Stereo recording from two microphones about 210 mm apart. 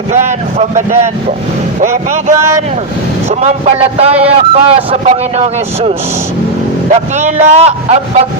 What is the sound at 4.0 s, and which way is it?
Speech, 30° right (ahead or behind).